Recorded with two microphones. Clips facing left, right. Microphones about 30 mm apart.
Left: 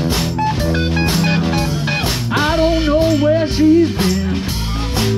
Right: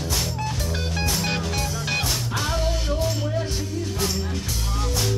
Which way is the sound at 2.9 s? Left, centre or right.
Left.